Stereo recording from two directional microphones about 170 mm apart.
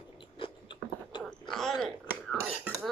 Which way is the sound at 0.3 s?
30° left (ahead or behind).